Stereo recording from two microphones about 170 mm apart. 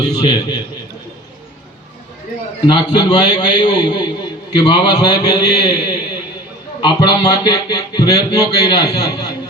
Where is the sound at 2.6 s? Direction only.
25° left (ahead or behind).